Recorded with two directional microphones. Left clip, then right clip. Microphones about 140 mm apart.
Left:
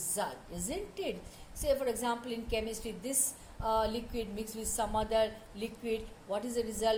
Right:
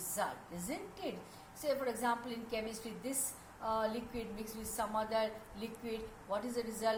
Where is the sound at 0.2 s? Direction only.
60° left (ahead or behind).